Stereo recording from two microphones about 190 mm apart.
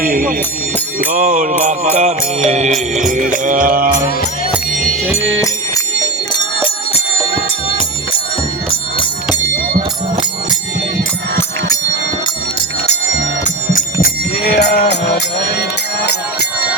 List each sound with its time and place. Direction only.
0.0 s bell: 45° right (ahead or behind)
1.1 s music: 45° right (ahead or behind)
5.1 s music: 15° left (ahead or behind)
6.3 s bell: 25° left (ahead or behind)
8.7 s music: 25° left (ahead or behind)
12.9 s music: 40° left (ahead or behind); by 14.9 s 55° left (ahead or behind)